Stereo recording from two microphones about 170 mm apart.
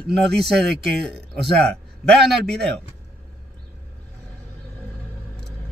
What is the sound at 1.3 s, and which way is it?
Speech, 75° right (ahead or behind).